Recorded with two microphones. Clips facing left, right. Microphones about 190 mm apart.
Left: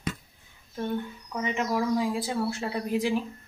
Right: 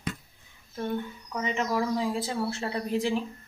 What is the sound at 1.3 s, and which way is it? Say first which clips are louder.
Speech: even; 10° left (ahead or behind).